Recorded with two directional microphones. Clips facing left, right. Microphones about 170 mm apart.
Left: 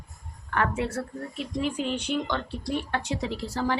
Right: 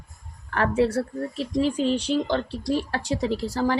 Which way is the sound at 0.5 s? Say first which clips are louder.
Right 6 dB; 35° right (ahead or behind).